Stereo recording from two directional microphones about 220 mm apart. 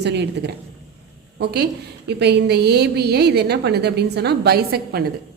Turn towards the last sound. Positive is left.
turn(degrees=-45)  # may be behind; listen again after turning